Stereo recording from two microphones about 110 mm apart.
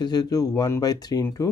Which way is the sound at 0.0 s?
35° left (ahead or behind).